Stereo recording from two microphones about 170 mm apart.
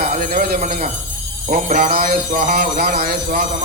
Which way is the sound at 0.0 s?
60° right (ahead or behind).